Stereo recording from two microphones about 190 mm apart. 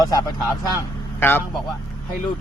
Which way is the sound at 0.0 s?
20° left (ahead or behind).